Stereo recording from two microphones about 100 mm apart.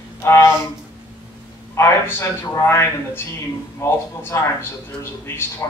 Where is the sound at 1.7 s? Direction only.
25° left (ahead or behind).